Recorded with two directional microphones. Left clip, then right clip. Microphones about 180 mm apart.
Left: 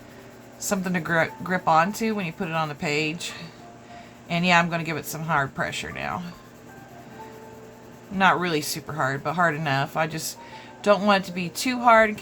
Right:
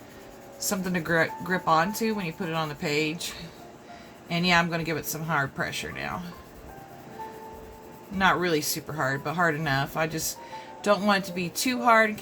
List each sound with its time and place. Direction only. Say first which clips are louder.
0.7 s speech: left 2 dB; 25° left (ahead or behind)
8.2 s speech: left 3 dB; 20° left (ahead or behind)